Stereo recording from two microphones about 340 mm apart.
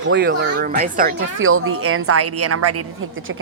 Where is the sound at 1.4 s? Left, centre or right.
Right.